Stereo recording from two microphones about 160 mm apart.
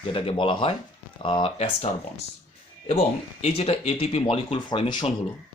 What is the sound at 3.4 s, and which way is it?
Speech, 40° left (ahead or behind).